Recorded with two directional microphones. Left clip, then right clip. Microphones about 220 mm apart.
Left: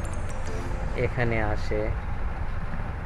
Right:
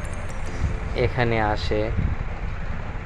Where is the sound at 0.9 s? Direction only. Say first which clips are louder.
Right 5 dB; 10° right (ahead or behind).